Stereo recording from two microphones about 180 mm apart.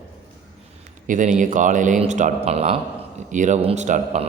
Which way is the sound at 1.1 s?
45° right (ahead or behind).